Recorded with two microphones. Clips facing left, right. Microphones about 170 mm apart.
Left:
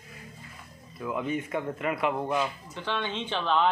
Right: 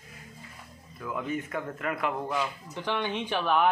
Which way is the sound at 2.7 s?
15° right (ahead or behind).